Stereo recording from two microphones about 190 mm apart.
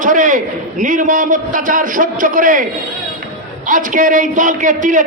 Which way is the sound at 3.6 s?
45° right (ahead or behind).